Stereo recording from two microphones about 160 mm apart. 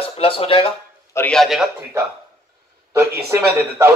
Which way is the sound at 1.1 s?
5° left (ahead or behind).